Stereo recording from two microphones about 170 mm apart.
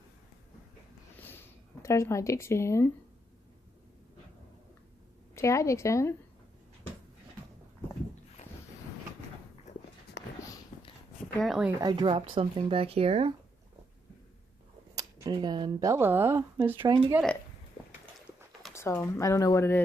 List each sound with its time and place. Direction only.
1.2 s a sound: 10° left (ahead or behind)
5.3 s speech: 15° left (ahead or behind)
10.2 s a sound: 90° left
11.3 s speech: centre (ahead or behind)
11.8 s speech: 25° right (ahead or behind)
14.9 s speech: 20° right (ahead or behind)
16.8 s speech: 30° right (ahead or behind)
18.7 s speech: 15° left (ahead or behind)